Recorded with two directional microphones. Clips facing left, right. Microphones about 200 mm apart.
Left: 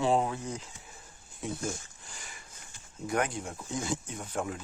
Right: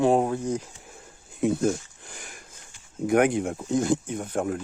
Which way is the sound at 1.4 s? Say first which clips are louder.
Right 12 dB; 55° right (ahead or behind).